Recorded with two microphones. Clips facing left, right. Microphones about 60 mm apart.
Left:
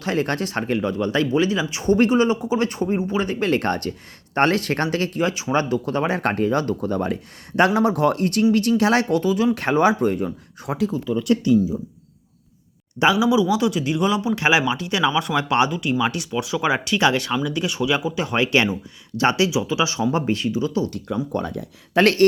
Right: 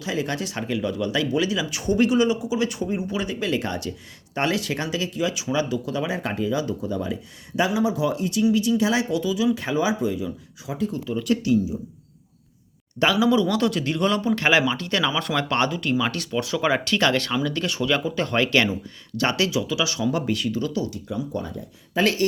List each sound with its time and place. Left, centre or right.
0.0 s speech: left
9.6 s speech: left
13.0 s speech: centre; by 20.5 s left
20.5 s speech: centre
21.3 s speech: left